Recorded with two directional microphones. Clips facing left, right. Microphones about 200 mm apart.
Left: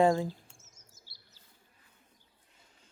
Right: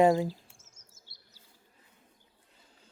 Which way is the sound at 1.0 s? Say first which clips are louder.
Right 1 dB; 20° right (ahead or behind).